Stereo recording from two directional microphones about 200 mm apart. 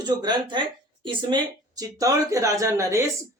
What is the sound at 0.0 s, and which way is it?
Speech, 20° right (ahead or behind).